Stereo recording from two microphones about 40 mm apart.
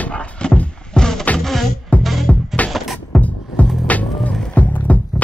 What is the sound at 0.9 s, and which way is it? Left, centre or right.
Music, centre.